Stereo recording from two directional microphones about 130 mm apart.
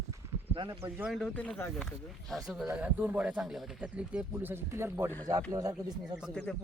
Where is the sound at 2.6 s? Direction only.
10° right (ahead or behind); by 6.1 s 30° right (ahead or behind).